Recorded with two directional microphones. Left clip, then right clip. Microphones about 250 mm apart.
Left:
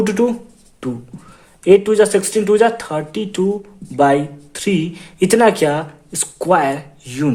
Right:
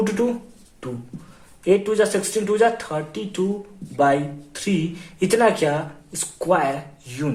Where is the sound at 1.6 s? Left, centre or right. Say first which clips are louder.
Left 7 dB; left.